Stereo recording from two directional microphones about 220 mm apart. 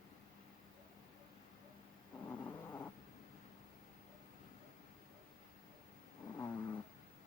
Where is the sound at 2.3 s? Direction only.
10° left (ahead or behind).